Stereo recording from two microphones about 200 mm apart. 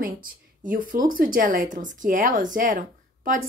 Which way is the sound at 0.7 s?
45° right (ahead or behind).